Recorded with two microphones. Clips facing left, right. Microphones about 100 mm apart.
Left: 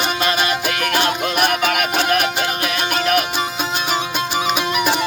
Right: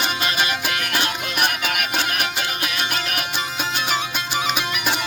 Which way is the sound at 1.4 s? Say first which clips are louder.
Left 5 dB; 65° left (ahead or behind).